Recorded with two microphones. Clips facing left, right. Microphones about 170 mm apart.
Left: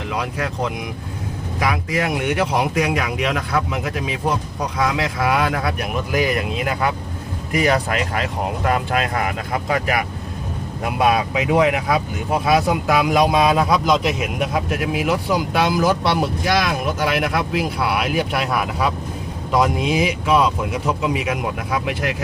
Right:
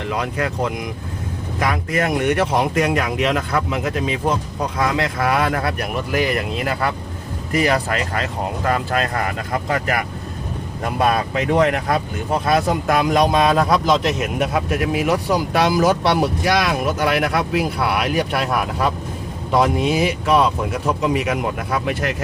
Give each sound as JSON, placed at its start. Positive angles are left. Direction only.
{"t": 0.1, "sound": "speech", "side_deg": 0}
{"t": 7.5, "sound": "speech", "side_deg": -40}
{"t": 10.8, "sound": "speech", "side_deg": 5}